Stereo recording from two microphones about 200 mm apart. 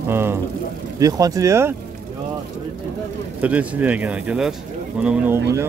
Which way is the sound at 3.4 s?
5° right (ahead or behind).